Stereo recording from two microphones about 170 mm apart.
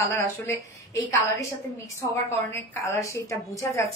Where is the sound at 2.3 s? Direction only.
15° left (ahead or behind).